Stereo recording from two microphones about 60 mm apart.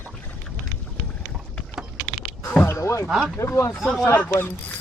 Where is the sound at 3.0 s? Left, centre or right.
Centre.